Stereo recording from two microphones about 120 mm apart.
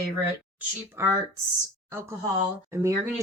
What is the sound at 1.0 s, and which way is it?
Speech, 25° right (ahead or behind).